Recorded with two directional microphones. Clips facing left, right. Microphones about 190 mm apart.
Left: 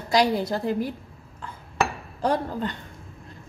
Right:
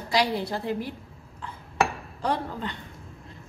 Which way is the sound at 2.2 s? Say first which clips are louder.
Left 4 dB; 45° left (ahead or behind).